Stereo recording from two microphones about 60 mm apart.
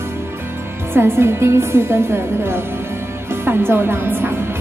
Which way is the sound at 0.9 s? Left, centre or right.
Right.